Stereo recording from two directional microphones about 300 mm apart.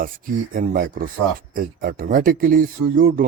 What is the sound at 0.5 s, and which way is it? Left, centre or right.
Speech, right.